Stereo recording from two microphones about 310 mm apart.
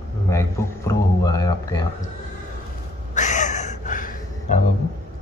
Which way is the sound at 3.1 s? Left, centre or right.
Left.